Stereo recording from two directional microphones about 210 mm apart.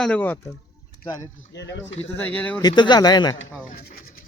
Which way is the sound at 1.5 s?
55° left (ahead or behind).